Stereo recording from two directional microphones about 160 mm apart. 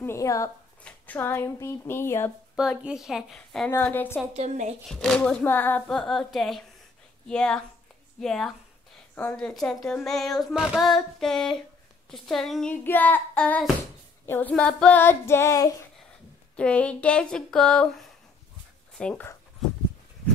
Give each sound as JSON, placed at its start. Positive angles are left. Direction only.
{"t": 0.0, "sound": "a sound", "side_deg": 20}
{"t": 0.8, "sound": "child singing", "side_deg": 10}
{"t": 2.5, "sound": "speech", "side_deg": -5}
{"t": 3.7, "sound": "child singing", "side_deg": 10}
{"t": 4.3, "sound": "a woman's voice", "side_deg": -45}
{"t": 4.8, "sound": "speech", "side_deg": 5}
{"t": 12.8, "sound": "child singing", "side_deg": 10}
{"t": 16.5, "sound": "child singing", "side_deg": 5}